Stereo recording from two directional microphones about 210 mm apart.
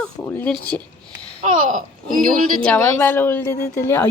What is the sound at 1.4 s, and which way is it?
Speech, 40° right (ahead or behind).